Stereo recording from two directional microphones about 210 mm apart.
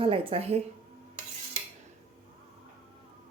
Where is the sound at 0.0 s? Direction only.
25° right (ahead or behind).